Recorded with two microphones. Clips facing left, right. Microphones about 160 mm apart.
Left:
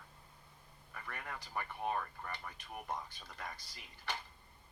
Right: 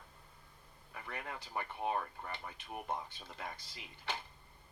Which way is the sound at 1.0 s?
20° right (ahead or behind).